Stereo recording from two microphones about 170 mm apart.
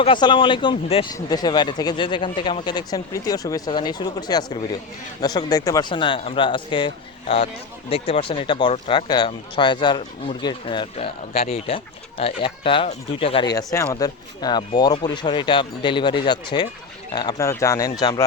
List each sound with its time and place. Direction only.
0.0 s speech: 30° left (ahead or behind)